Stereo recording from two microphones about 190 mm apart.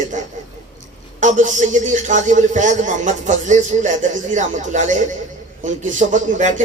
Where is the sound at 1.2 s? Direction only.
40° right (ahead or behind).